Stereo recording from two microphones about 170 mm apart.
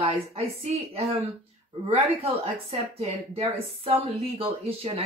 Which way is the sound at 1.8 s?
35° right (ahead or behind).